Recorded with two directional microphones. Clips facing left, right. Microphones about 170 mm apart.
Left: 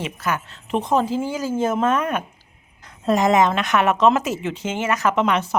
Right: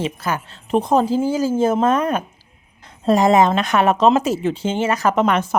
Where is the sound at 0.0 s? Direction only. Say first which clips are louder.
Right 2 dB; 35° right (ahead or behind).